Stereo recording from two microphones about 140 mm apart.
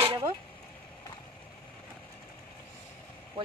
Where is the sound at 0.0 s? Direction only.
40° right (ahead or behind).